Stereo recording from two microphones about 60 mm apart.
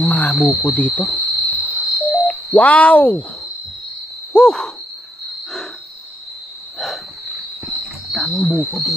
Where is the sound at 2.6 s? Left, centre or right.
Left.